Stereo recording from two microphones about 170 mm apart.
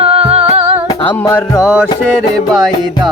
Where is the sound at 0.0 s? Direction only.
35° right (ahead or behind).